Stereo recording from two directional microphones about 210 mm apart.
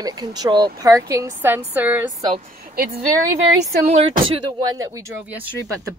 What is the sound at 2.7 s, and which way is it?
Speech, 45° right (ahead or behind).